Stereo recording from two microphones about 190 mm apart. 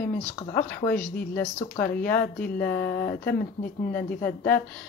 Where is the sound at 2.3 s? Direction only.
50° left (ahead or behind).